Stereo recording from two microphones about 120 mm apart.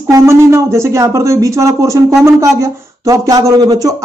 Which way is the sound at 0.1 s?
20° right (ahead or behind).